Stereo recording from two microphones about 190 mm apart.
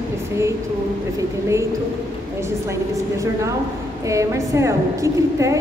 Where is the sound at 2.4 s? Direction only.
15° right (ahead or behind).